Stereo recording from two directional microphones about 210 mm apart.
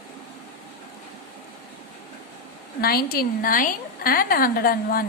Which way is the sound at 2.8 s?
45° left (ahead or behind).